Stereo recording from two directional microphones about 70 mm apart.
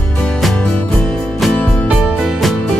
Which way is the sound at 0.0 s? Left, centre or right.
Centre.